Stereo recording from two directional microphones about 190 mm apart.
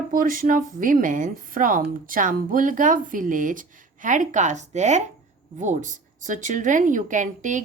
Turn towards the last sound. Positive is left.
turn(degrees=-40)  # may be behind; listen again after turning